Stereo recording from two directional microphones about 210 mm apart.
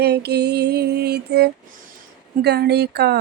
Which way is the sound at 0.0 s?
50° right (ahead or behind).